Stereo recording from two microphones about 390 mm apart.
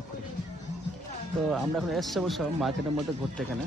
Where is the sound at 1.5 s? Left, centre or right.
Centre.